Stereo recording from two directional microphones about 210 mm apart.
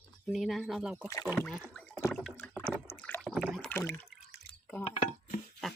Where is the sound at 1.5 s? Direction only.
5° left (ahead or behind).